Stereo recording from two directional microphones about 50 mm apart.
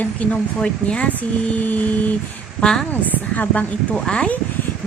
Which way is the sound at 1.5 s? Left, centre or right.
Left.